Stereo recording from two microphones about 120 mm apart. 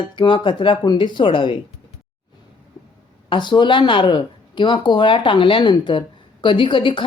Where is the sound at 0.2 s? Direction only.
40° left (ahead or behind).